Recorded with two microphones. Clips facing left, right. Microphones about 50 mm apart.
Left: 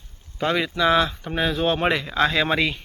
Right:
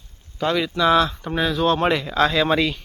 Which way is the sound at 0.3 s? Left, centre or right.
Centre.